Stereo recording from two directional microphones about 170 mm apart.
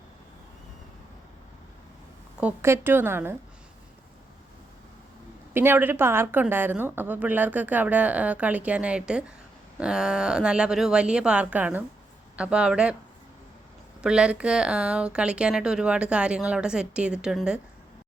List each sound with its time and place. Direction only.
2.4 s a woman's voice: 10° right (ahead or behind)
5.5 s a woman's voice: 10° right (ahead or behind)
14.0 s speech: 5° right (ahead or behind)